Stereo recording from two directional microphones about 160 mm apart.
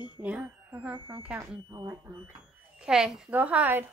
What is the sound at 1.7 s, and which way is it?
Speech, 25° right (ahead or behind).